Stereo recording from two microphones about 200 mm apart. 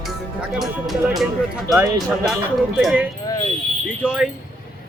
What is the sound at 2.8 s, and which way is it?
Speech, 5° right (ahead or behind).